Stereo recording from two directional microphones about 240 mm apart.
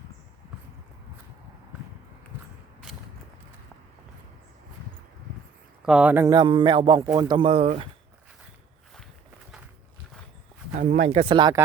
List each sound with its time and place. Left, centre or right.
5.8 s a man's voice: centre; by 7.9 s right
10.8 s speech: right